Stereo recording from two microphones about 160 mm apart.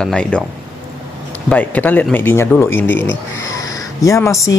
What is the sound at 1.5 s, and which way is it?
Speech, 10° left (ahead or behind).